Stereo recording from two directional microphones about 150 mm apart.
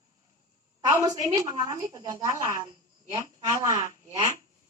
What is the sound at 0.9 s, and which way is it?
A woman's voice, 25° right (ahead or behind).